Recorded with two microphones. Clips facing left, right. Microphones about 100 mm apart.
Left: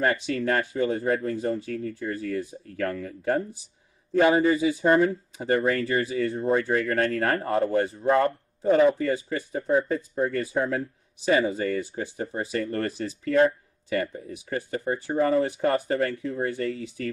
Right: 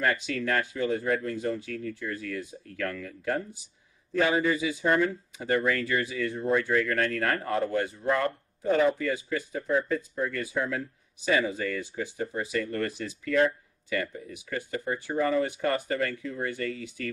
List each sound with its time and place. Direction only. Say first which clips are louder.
0.0 s speech: left 3 dB; 30° left (ahead or behind)
4.1 s a man's voice: left 5 dB; 20° left (ahead or behind)
4.4 s speech: left 5 dB; 35° left (ahead or behind)